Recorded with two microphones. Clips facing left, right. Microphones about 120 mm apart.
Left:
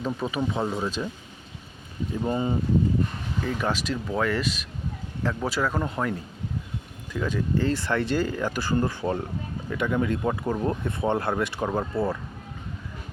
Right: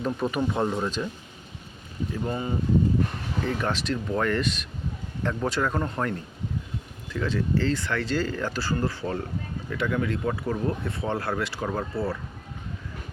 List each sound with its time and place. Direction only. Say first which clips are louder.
0.0 s speech: right 1 dB; centre (ahead or behind)
2.2 s speech: left 4 dB; 20° left (ahead or behind)
3.4 s speech: even; 10° left (ahead or behind)